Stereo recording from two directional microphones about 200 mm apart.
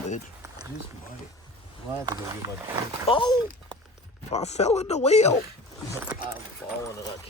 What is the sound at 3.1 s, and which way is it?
Speech, 25° left (ahead or behind).